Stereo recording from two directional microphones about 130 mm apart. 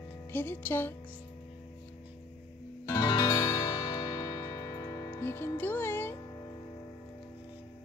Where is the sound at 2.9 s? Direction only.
35° left (ahead or behind).